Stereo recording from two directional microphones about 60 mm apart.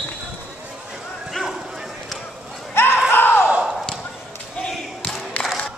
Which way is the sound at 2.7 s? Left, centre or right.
Left.